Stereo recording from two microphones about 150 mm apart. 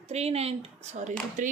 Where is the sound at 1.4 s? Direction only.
60° right (ahead or behind).